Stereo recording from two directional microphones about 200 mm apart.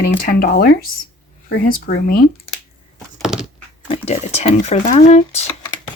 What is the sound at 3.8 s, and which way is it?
Speech, 30° left (ahead or behind).